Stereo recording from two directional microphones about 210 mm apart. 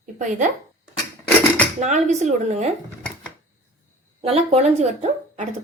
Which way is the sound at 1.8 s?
35° right (ahead or behind).